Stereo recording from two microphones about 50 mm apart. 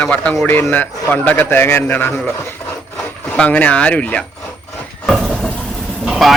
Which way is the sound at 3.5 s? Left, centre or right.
Left.